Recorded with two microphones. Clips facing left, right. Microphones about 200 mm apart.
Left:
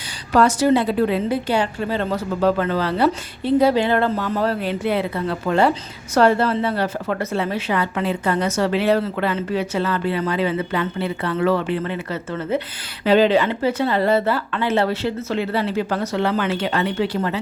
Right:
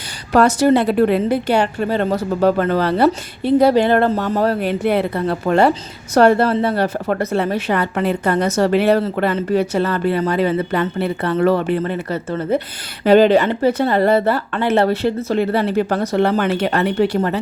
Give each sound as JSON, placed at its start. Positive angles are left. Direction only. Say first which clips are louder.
{"t": 0.3, "sound": "a woman's voice", "louder": "right 3 dB", "side_deg": -65}
{"t": 4.6, "sound": "a woman's voice", "louder": "right 4 dB", "side_deg": -60}
{"t": 5.1, "sound": "a woman's voice", "louder": "right 4 dB", "side_deg": -45}
{"t": 7.5, "sound": "a woman's voice", "louder": "right 3 dB", "side_deg": -55}
{"t": 14.6, "sound": "a woman's voice", "louder": "right 5 dB", "side_deg": -65}
{"t": 16.0, "sound": "speech", "louder": "right 4 dB", "side_deg": -50}
{"t": 16.5, "sound": "a woman's voice", "louder": "right 4 dB", "side_deg": -65}